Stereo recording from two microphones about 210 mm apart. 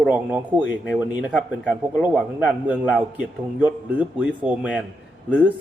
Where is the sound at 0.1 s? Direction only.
5° right (ahead or behind).